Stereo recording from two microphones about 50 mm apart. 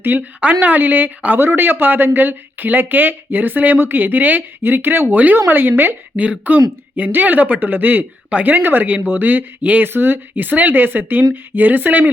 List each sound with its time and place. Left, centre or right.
0.2 s speech: right
5.1 s a woman's voice: right
6.4 s speech: right